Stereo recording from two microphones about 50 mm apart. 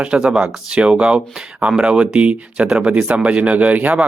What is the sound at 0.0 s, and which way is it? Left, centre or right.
Speech, centre.